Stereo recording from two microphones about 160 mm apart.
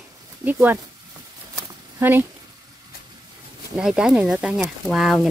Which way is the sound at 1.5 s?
15° right (ahead or behind).